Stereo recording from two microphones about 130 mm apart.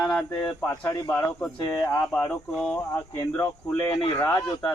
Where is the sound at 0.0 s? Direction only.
5° left (ahead or behind).